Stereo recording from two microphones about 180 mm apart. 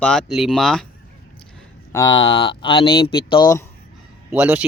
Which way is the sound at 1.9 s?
25° left (ahead or behind).